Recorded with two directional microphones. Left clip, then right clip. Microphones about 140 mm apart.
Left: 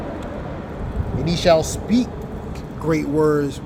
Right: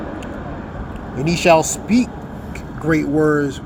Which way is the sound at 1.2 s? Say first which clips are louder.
Right 3 dB; 30° right (ahead or behind).